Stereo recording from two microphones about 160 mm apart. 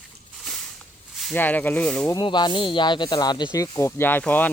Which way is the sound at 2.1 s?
25° left (ahead or behind).